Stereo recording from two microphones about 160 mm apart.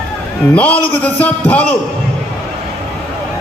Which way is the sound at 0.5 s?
10° left (ahead or behind).